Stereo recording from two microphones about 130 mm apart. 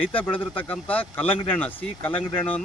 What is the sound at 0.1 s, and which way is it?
Speech, 10° left (ahead or behind).